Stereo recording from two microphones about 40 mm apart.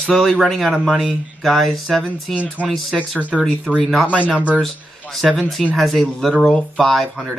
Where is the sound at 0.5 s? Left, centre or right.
Centre.